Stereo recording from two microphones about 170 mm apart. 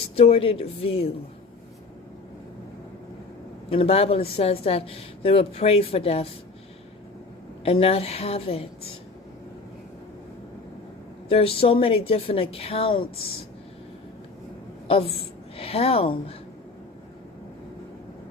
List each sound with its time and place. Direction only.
0.2 s speech: 35° left (ahead or behind)
3.7 s speech: 35° left (ahead or behind)
7.6 s speech: 35° left (ahead or behind)
11.3 s speech: 35° left (ahead or behind)
14.8 s a woman's voice: 35° left (ahead or behind)